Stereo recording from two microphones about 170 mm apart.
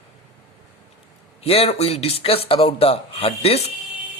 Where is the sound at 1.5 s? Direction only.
35° left (ahead or behind).